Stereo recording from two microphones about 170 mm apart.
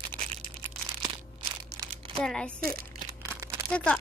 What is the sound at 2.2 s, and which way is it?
Speech, 5° left (ahead or behind).